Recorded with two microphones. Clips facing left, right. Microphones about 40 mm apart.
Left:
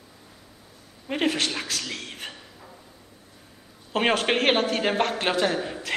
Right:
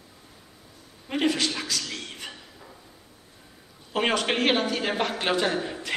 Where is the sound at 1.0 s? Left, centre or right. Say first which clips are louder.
Even; centre.